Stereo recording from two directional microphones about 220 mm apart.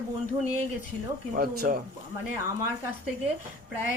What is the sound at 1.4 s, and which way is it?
Speech, 40° right (ahead or behind).